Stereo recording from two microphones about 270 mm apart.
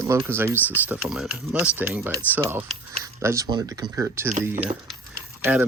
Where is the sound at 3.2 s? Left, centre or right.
Centre.